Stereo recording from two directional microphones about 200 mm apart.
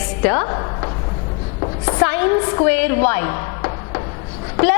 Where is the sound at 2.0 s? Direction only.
10° left (ahead or behind).